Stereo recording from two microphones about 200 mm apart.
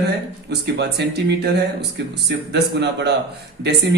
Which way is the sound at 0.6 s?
55° right (ahead or behind).